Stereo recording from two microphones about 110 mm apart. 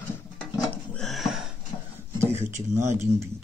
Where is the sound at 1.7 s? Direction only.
35° left (ahead or behind).